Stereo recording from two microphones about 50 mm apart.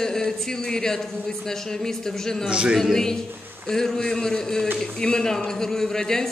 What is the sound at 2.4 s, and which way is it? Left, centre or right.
Speech, centre.